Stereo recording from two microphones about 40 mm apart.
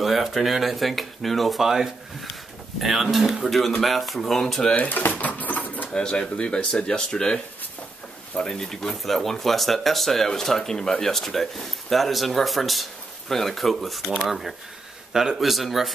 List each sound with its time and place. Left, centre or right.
0.0 s speech: centre
1.6 s speech: centre
4.7 s a sound: left
5.9 s speech: left
8.4 s speech: centre